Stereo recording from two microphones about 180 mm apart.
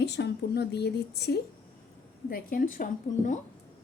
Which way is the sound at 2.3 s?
50° left (ahead or behind).